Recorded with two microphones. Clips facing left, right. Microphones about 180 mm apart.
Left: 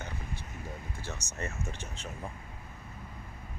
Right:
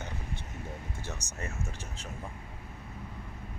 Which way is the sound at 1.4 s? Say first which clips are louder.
Left 3 dB; 5° right (ahead or behind).